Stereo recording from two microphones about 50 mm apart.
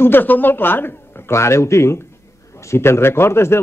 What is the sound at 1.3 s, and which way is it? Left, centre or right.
Speech, left.